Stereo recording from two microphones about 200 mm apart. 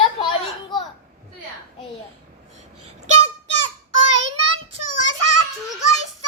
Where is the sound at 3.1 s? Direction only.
35° right (ahead or behind).